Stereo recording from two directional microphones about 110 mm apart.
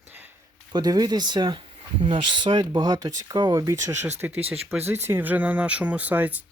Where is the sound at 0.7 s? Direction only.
35° right (ahead or behind).